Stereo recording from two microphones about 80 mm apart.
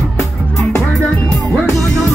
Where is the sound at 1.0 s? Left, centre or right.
Centre.